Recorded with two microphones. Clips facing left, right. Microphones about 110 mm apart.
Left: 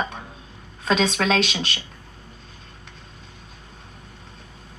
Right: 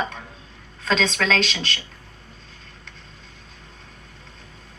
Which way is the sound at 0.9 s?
10° left (ahead or behind).